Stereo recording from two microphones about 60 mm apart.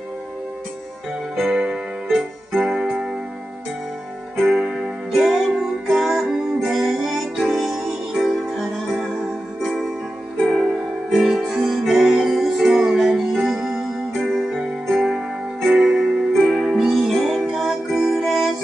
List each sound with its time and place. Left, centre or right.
1.3 s keyboard: centre
5.1 s music: centre
10.4 s music: centre
16.9 s music: centre